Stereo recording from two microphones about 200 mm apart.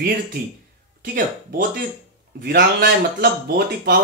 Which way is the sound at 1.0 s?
40° right (ahead or behind).